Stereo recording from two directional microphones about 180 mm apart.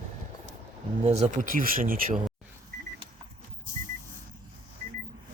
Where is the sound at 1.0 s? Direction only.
35° right (ahead or behind).